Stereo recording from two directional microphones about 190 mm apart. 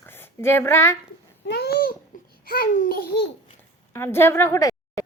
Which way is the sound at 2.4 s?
50° left (ahead or behind).